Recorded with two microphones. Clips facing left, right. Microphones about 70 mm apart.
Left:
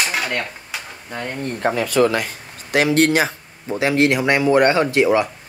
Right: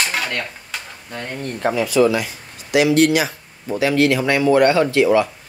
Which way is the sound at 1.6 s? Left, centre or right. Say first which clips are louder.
Right 1 dB; left.